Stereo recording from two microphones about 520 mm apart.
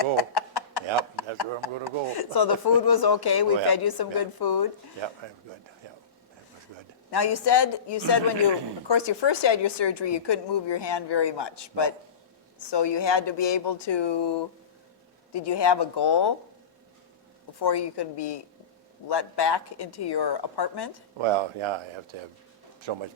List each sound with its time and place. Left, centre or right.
0.0 s a sound: left
1.8 s a woman's voice: left
7.1 s a woman's voice: left
17.6 s a woman's voice: left
21.2 s speech: right